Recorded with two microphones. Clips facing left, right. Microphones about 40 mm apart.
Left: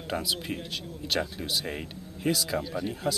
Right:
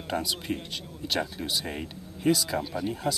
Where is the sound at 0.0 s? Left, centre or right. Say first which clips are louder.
Even; centre.